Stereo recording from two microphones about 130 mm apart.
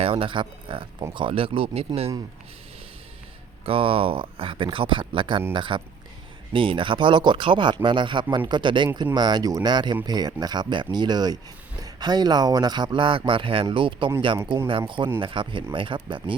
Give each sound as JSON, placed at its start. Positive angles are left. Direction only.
{"t": 0.0, "sound": "speech", "side_deg": -45}
{"t": 3.7, "sound": "speech", "side_deg": -45}